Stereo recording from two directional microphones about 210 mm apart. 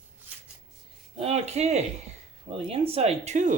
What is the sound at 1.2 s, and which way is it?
Speech, 30° right (ahead or behind).